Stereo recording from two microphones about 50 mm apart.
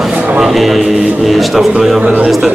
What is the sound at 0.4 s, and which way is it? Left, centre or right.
A man's voice, centre.